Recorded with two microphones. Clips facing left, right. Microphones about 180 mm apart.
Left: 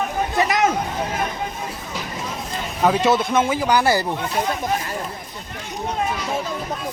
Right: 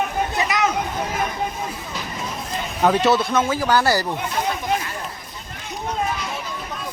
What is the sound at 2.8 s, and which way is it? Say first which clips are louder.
Speech: even; 10° left (ahead or behind).